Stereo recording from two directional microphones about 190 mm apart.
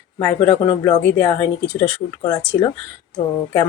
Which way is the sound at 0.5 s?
20° left (ahead or behind).